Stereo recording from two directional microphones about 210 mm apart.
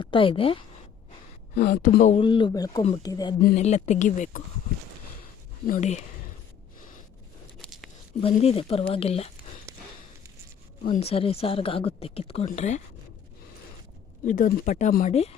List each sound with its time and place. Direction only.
0.0 s a woman's voice: 25° left (ahead or behind)
1.5 s speech: 45° left (ahead or behind)
2.2 s a woman's voice: 25° left (ahead or behind)
3.5 s speech: 30° left (ahead or behind)
5.6 s speech: 35° left (ahead or behind)
7.6 s a sound: centre (ahead or behind)
8.2 s a woman's voice: 30° left (ahead or behind)
9.7 s a sound: 15° right (ahead or behind)
11.1 s a woman's voice: 30° left (ahead or behind)
14.3 s speech: 40° left (ahead or behind)